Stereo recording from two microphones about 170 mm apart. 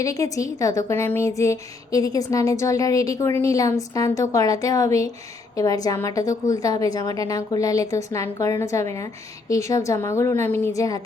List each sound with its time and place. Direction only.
0.0 s a woman's voice: 20° left (ahead or behind)